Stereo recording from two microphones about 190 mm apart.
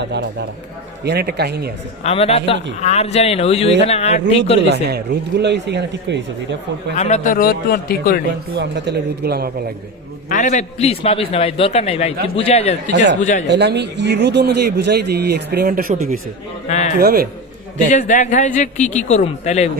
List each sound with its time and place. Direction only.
0.0 s speech: 65° right (ahead or behind)
2.0 s a man's voice: 35° left (ahead or behind)
4.6 s speech: 60° right (ahead or behind)
6.9 s speech: 40° left (ahead or behind)
8.5 s speech: 60° right (ahead or behind)
10.2 s a man's voice: 40° left (ahead or behind)
13.5 s speech: 60° right (ahead or behind)
16.6 s a man's voice: 35° left (ahead or behind)
17.0 s speech: 55° right (ahead or behind)
17.9 s a man's voice: 40° left (ahead or behind)